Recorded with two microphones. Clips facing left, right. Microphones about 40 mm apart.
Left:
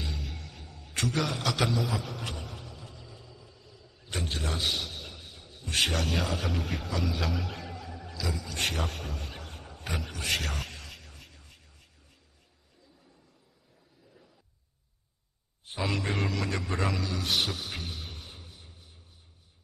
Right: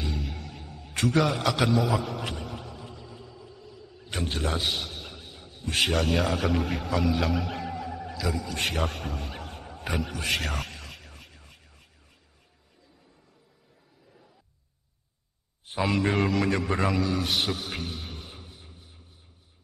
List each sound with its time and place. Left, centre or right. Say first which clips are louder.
0.0 s a sound: right 5 dB; centre
7.0 s speech: right 6 dB; centre
7.7 s a sound: right 7 dB; centre
8.6 s a man's voice: right 2 dB; centre
11.0 s vehicle: right 3 dB; centre
15.7 s a man's voice: right 6 dB; centre
16.7 s a man's voice: right 5 dB; centre
17.3 s mantra: right 2 dB; centre
18.0 s a sound: right 3 dB; centre